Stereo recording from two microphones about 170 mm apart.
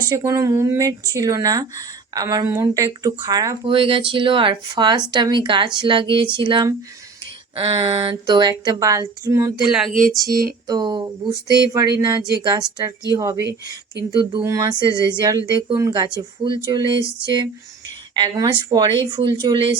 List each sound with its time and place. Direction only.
0.0 s speech: 20° right (ahead or behind)
3.7 s speech: 30° right (ahead or behind)
7.5 s a sound: 35° right (ahead or behind)
7.9 s speech: 30° right (ahead or behind)
14.4 s speech: 20° right (ahead or behind)